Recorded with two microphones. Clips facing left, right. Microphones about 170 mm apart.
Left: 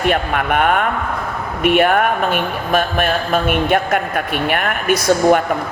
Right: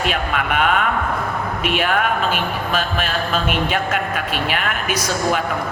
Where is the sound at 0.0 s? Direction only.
55° left (ahead or behind).